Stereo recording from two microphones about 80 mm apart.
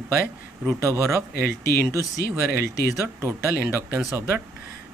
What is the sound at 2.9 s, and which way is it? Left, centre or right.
Speech, right.